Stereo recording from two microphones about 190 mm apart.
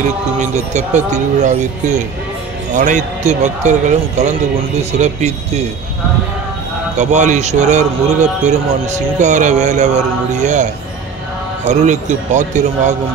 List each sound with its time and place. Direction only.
0.4 s a man's voice: 40° right (ahead or behind)
7.0 s a man's voice: 40° right (ahead or behind)